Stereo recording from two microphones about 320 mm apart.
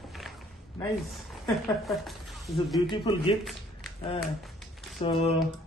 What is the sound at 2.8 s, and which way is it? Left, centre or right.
Speech, centre.